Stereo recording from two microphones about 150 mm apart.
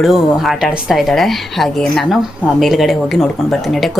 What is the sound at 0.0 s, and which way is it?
Speech, centre (ahead or behind).